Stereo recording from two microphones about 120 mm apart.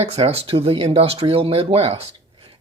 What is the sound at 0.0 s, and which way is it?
Speech, 55° right (ahead or behind).